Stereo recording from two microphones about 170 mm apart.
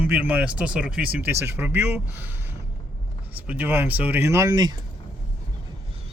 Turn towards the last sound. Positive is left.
turn(degrees=-20)  # may be behind; listen again after turning